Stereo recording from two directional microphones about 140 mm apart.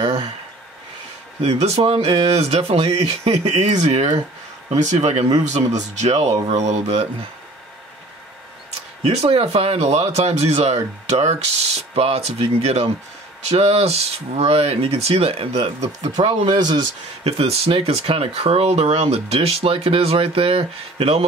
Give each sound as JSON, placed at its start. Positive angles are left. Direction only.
{"t": 0.0, "sound": "a sound", "side_deg": -45}
{"t": 1.4, "sound": "speech", "side_deg": -50}
{"t": 9.0, "sound": "speech", "side_deg": -45}
{"t": 16.3, "sound": "speech", "side_deg": -40}